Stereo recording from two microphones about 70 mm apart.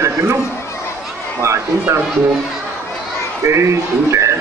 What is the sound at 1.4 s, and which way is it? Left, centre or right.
Speech, right.